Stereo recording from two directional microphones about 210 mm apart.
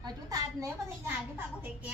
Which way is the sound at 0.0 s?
15° right (ahead or behind).